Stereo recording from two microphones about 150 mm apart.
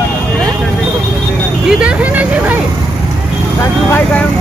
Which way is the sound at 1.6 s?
5° right (ahead or behind).